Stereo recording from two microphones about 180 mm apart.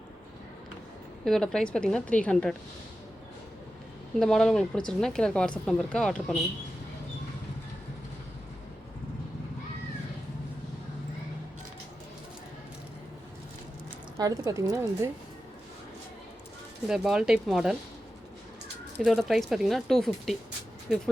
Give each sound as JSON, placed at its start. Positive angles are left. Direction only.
{"t": 1.2, "sound": "speech", "side_deg": 0}
{"t": 4.2, "sound": "speech", "side_deg": 0}
{"t": 14.2, "sound": "a woman's voice", "side_deg": -20}
{"t": 16.9, "sound": "speech", "side_deg": 0}
{"t": 18.9, "sound": "speech", "side_deg": 0}